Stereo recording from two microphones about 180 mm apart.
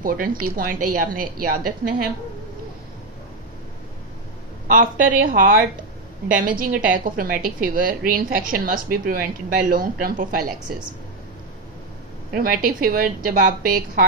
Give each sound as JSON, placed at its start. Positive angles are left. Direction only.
{"t": 0.0, "sound": "a woman's voice", "side_deg": -50}
{"t": 4.6, "sound": "a woman's voice", "side_deg": -50}
{"t": 6.6, "sound": "a woman's voice", "side_deg": -50}
{"t": 12.3, "sound": "a woman's voice", "side_deg": -50}